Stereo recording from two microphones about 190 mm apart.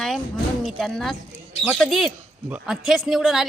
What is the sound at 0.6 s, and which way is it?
A man's voice, centre (ahead or behind).